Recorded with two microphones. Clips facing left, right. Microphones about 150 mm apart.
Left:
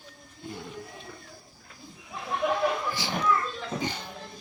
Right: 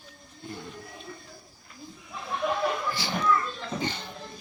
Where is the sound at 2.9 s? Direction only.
20° left (ahead or behind).